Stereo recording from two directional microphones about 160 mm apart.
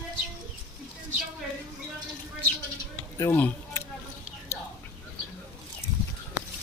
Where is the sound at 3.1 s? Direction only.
15° left (ahead or behind).